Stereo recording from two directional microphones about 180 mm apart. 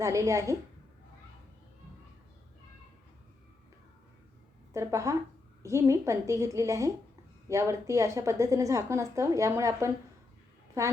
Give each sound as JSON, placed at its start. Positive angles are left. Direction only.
{"t": 0.0, "sound": "a woman's voice", "side_deg": -15}
{"t": 4.7, "sound": "a woman's voice", "side_deg": -15}